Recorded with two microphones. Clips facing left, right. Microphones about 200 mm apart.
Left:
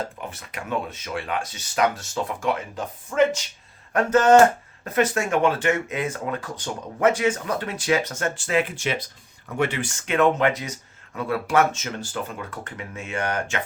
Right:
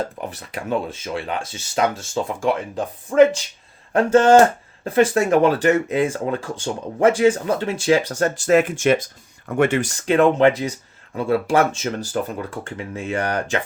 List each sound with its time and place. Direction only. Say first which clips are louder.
0.2 s speech: right 5 dB; 35° right (ahead or behind)